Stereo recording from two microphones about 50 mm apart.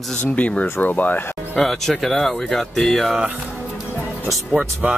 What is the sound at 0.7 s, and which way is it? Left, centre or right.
Speech, left.